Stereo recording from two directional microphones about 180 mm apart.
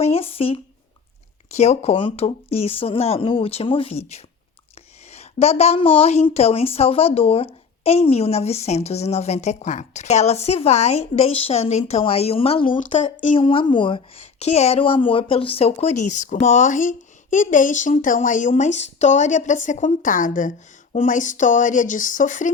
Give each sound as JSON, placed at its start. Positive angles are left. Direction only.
{"t": 0.0, "sound": "a woman's voice", "side_deg": 35}